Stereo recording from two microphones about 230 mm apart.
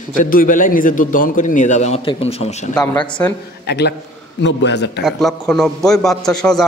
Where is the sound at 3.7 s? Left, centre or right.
Left.